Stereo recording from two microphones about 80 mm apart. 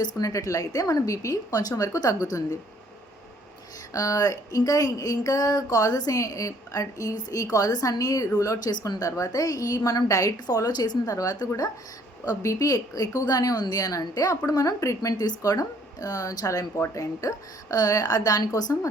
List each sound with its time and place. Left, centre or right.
0.0 s speech: left
3.9 s speech: left
8.5 s speech: left
10.4 s a woman's voice: left
11.1 s speech: left